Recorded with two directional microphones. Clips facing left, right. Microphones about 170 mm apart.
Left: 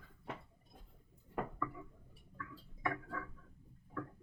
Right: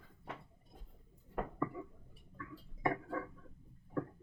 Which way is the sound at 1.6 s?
30° right (ahead or behind).